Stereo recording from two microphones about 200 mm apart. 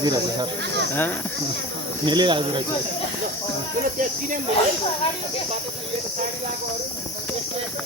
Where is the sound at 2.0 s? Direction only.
25° right (ahead or behind).